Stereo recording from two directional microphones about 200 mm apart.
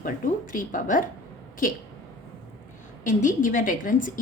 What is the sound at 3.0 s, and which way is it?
A woman's voice, 40° left (ahead or behind).